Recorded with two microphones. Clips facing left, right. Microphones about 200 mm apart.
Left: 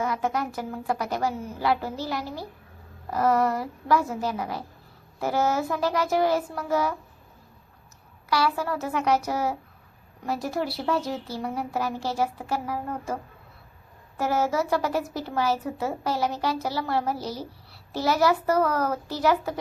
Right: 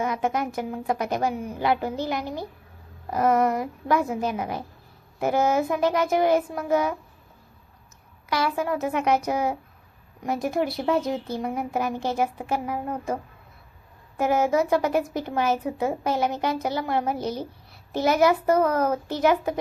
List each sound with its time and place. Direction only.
0.0 s a woman's voice: 20° right (ahead or behind)
8.3 s a woman's voice: 20° right (ahead or behind)
14.2 s a woman's voice: 20° right (ahead or behind)